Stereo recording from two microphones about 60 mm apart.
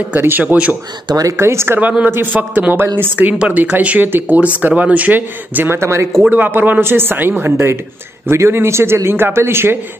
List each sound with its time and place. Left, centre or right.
0.2 s speech: right
1.3 s speech: right
1.8 s speech: right
5.8 s speech: right
6.3 s speech: right